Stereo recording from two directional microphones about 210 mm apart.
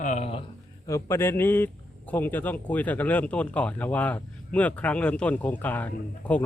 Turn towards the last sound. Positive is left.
turn(degrees=5)  # may be behind; listen again after turning